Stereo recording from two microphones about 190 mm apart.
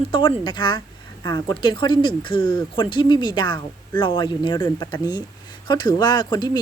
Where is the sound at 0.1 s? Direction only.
25° left (ahead or behind).